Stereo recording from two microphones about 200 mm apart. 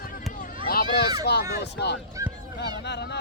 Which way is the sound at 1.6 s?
55° left (ahead or behind).